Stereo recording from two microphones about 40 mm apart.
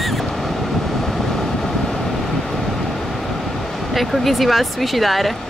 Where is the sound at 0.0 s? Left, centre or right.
Centre.